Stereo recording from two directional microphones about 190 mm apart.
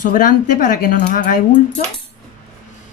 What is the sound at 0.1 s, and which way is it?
Speech, 45° left (ahead or behind).